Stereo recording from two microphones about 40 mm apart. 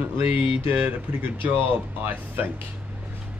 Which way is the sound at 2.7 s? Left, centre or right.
Right.